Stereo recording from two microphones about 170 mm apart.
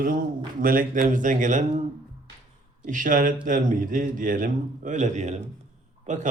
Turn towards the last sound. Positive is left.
turn(degrees=-45)  # may be behind; listen again after turning